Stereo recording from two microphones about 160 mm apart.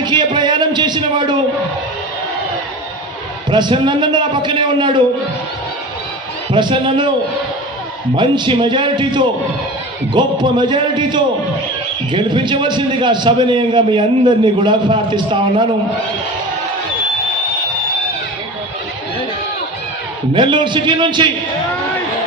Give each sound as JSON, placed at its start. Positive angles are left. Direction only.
{"t": 0.0, "sound": "a man's voice", "side_deg": -30}
{"t": 3.5, "sound": "a man's voice", "side_deg": -30}
{"t": 6.5, "sound": "a man's voice", "side_deg": -30}
{"t": 8.1, "sound": "a man's voice", "side_deg": -30}
{"t": 10.4, "sound": "a man's voice", "side_deg": -30}
{"t": 20.3, "sound": "a man's voice", "side_deg": -30}